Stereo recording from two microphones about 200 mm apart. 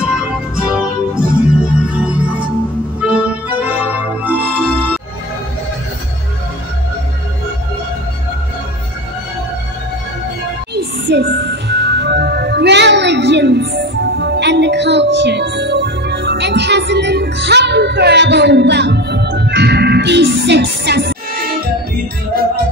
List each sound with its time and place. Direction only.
0.0 s music: 5° right (ahead or behind)
10.7 s music: 60° right (ahead or behind)